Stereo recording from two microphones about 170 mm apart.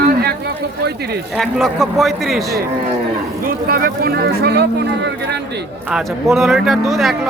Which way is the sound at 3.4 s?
60° right (ahead or behind).